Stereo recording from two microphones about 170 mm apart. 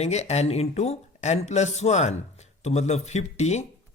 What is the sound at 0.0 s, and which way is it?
A man's voice, 40° left (ahead or behind).